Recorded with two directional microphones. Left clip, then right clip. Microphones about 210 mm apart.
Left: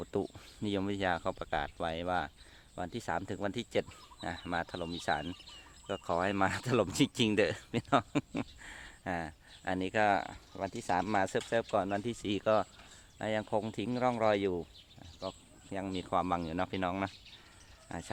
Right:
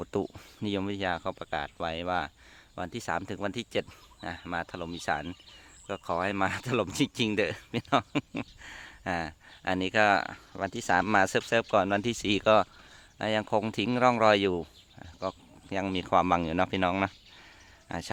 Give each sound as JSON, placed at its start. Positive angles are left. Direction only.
{"t": 0.0, "sound": "speech", "side_deg": -20}
{"t": 8.7, "sound": "speech", "side_deg": -20}